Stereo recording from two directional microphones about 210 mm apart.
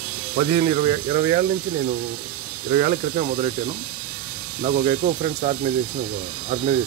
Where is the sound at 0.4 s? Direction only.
30° right (ahead or behind).